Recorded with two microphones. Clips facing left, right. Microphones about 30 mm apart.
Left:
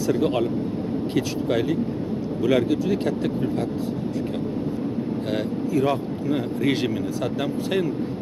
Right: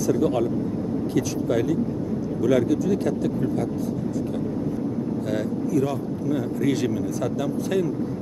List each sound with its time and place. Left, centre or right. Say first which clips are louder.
0.1 s speech: even; left
5.3 s speech: even; left